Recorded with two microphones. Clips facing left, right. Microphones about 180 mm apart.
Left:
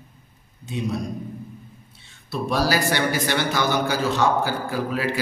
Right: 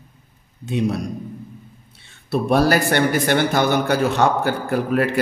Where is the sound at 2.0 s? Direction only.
60° right (ahead or behind).